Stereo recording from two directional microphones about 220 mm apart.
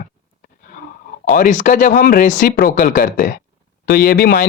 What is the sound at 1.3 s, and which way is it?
Speech, 35° left (ahead or behind).